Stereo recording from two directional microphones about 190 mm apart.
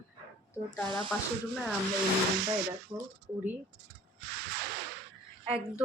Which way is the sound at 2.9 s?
15° right (ahead or behind).